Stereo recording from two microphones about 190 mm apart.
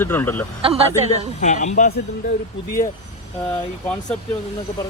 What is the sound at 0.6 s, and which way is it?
Speech, 30° right (ahead or behind).